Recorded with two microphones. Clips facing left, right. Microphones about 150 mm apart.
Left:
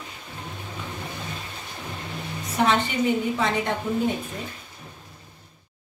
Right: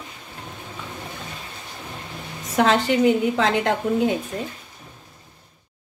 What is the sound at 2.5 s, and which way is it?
A woman's voice, 90° right.